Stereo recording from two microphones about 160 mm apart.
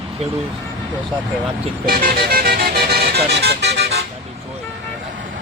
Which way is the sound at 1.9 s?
65° right (ahead or behind).